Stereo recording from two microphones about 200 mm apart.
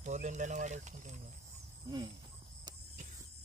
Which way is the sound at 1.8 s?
20° right (ahead or behind).